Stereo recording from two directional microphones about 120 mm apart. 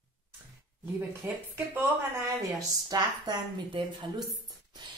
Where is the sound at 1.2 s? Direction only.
20° right (ahead or behind).